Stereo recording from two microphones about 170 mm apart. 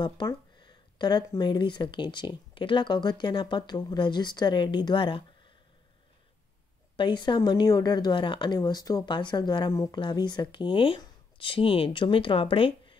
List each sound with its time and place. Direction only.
0.0 s a woman's voice: 25° left (ahead or behind)
7.0 s a woman's voice: 25° left (ahead or behind)